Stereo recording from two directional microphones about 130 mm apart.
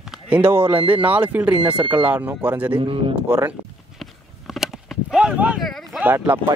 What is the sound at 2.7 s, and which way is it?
Speech, 45° right (ahead or behind).